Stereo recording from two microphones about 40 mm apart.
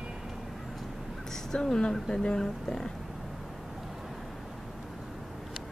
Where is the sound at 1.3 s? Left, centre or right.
Centre.